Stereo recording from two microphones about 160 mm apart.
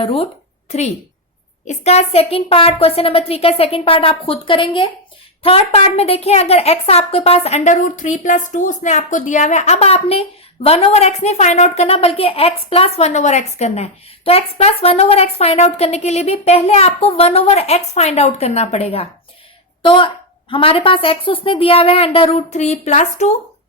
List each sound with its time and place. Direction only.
0.0 s a woman's voice: 35° left (ahead or behind)
1.6 s a woman's voice: 45° left (ahead or behind)